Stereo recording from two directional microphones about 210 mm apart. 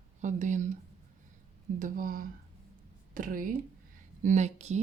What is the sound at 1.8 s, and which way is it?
Speech, 40° right (ahead or behind).